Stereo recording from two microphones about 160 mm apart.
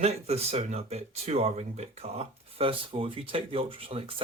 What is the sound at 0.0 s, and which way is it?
Speech, 40° right (ahead or behind).